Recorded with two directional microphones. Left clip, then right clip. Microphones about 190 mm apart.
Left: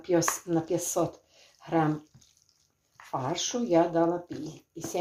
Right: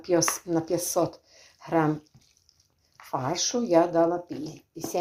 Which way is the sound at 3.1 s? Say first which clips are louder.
Right 3 dB; 20° right (ahead or behind).